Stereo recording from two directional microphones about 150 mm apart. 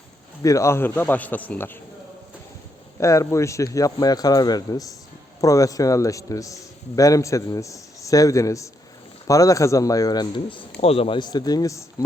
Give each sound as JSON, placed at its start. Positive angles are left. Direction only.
{"t": 0.4, "sound": "speech", "side_deg": 20}
{"t": 3.0, "sound": "a man's voice", "side_deg": 20}
{"t": 10.8, "sound": "a man's voice", "side_deg": 40}